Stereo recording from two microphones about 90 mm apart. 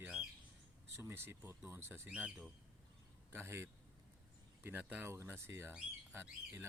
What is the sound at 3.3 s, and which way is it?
Speech, 25° right (ahead or behind).